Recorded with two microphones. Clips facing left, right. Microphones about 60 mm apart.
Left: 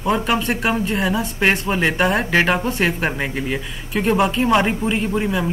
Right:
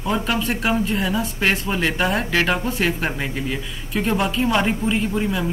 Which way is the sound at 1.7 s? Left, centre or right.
Centre.